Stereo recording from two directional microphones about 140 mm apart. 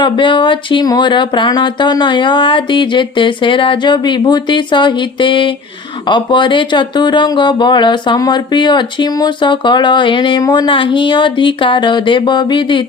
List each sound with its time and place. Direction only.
0.0 s speech: 35° left (ahead or behind)